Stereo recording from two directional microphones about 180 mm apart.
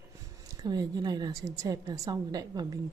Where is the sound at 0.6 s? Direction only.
20° right (ahead or behind).